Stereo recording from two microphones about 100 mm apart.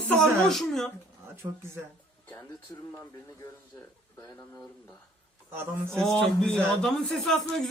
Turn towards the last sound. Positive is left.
turn(degrees=5)  # may be behind; listen again after turning